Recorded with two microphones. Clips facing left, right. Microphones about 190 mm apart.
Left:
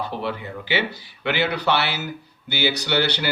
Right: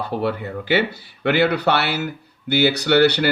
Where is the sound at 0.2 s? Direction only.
55° right (ahead or behind).